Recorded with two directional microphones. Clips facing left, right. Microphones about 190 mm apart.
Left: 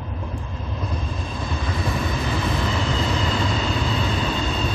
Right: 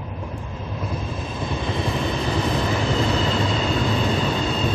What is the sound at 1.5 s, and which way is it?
Vehicle, 20° right (ahead or behind).